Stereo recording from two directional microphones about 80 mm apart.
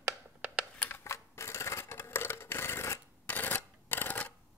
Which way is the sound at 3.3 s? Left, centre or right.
Left.